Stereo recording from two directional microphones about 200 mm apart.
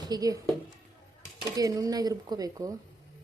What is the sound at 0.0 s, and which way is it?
Speech, 20° right (ahead or behind).